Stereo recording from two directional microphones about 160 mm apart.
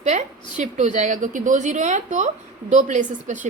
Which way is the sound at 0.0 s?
45° right (ahead or behind).